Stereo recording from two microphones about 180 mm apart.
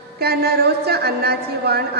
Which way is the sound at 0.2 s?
60° right (ahead or behind).